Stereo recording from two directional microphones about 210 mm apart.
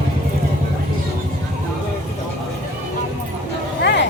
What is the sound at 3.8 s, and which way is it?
Vehicle, 55° left (ahead or behind).